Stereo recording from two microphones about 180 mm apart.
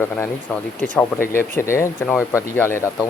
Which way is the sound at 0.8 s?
10° left (ahead or behind).